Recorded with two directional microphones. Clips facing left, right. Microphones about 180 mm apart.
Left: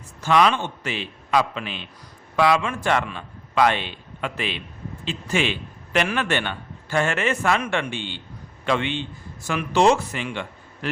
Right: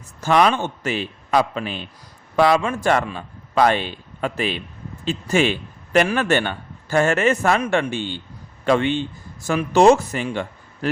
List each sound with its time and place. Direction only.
0.2 s a man's voice: 45° right (ahead or behind)